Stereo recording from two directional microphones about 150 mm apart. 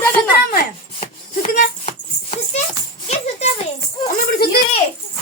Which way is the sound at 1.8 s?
45° left (ahead or behind).